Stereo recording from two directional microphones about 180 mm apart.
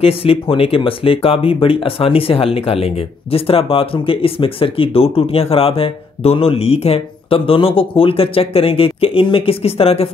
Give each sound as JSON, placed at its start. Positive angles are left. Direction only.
{"t": 0.0, "sound": "speech", "side_deg": 30}